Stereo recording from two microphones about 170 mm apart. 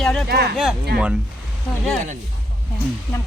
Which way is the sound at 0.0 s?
5° left (ahead or behind).